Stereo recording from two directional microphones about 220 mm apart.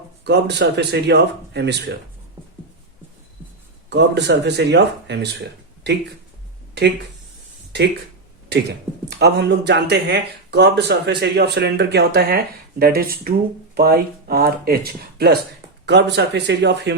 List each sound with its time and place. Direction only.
0.3 s speech: 50° right (ahead or behind)
3.8 s speech: 50° right (ahead or behind)
9.0 s speech: 50° right (ahead or behind)